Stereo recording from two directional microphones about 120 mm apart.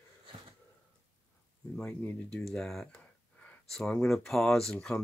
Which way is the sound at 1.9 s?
15° left (ahead or behind).